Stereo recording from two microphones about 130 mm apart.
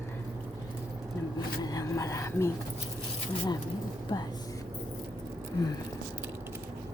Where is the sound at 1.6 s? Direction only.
30° left (ahead or behind).